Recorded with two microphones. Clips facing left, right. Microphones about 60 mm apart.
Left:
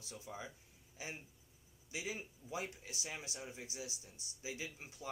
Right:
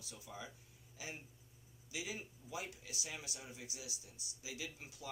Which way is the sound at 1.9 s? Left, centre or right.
Left.